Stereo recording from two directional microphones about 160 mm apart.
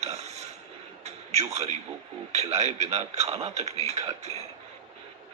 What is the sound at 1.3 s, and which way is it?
A man's voice, 45° right (ahead or behind).